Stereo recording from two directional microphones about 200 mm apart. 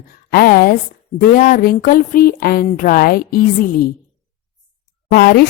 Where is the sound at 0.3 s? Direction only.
50° left (ahead or behind).